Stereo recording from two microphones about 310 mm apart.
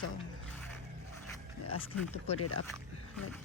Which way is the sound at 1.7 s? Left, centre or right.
Left.